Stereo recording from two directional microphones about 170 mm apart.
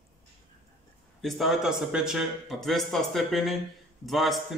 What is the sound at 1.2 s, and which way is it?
Speech, centre (ahead or behind).